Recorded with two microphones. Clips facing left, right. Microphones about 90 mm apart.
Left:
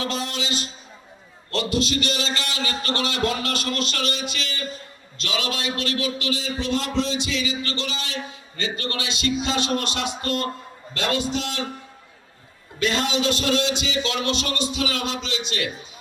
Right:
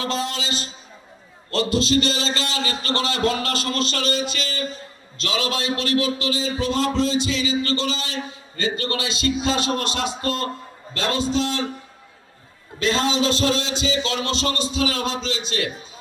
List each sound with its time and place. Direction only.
0.0 s a man's voice: 30° right (ahead or behind)
12.8 s a man's voice: 30° right (ahead or behind)